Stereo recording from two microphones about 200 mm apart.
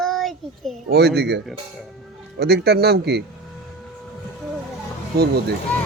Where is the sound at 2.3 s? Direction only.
55° right (ahead or behind).